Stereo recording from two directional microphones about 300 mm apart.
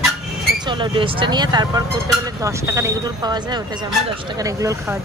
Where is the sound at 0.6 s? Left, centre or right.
Centre.